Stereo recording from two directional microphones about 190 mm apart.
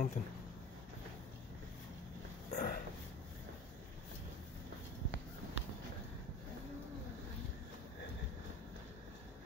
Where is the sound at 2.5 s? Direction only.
40° left (ahead or behind).